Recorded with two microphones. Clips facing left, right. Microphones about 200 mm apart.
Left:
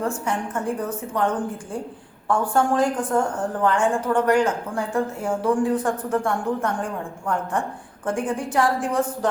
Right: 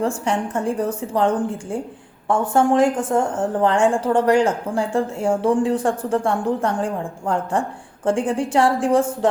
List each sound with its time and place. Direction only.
0.0 s a woman's voice: 30° right (ahead or behind)